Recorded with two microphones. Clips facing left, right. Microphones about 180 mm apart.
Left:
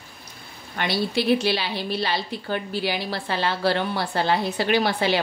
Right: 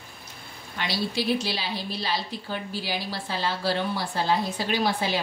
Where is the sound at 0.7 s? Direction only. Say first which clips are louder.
Left 4 dB; 60° left (ahead or behind).